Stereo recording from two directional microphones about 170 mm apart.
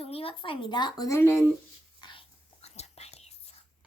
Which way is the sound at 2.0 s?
30° left (ahead or behind).